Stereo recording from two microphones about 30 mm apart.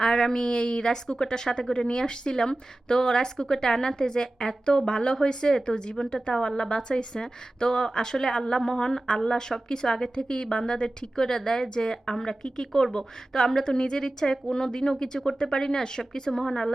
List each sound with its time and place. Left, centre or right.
0.0 s a woman's voice: centre